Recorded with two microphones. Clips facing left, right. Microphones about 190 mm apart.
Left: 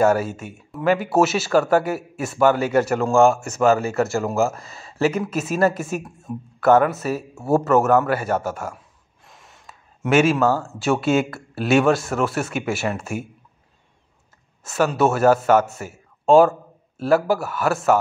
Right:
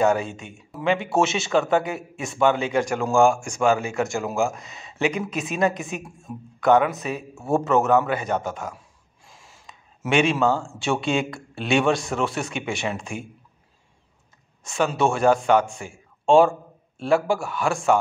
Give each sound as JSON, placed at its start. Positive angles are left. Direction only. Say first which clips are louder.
{"t": 0.0, "sound": "speech", "louder": "left 3 dB", "side_deg": 5}
{"t": 4.5, "sound": "speech", "louder": "left 2 dB", "side_deg": -15}
{"t": 4.9, "sound": "a man's voice", "louder": "left 4 dB", "side_deg": 0}
{"t": 9.3, "sound": "a sound", "louder": "left 2 dB", "side_deg": 0}
{"t": 10.8, "sound": "speech", "louder": "left 4 dB", "side_deg": 5}
{"t": 14.6, "sound": "a man's voice", "louder": "left 3 dB", "side_deg": 5}